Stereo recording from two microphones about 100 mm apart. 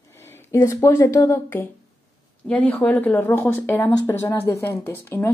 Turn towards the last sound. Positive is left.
turn(degrees=20)  # may be behind; listen again after turning